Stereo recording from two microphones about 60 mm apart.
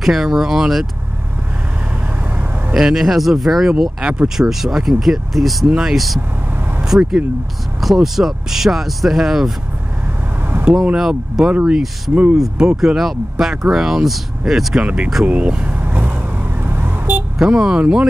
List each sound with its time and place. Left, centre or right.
0.0 s speech: centre
2.7 s speech: centre
3.7 s speech: centre
4.4 s speech: centre
7.8 s speech: centre
10.6 s speech: centre
11.5 s speech: centre
12.4 s speech: centre
15.2 s speech: right
15.6 s vehicle: right
17.4 s speech: centre